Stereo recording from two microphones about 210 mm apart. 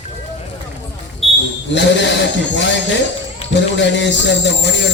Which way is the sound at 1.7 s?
55° left (ahead or behind).